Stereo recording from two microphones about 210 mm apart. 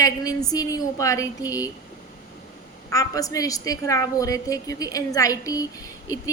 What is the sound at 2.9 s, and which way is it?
A woman's voice, 15° left (ahead or behind).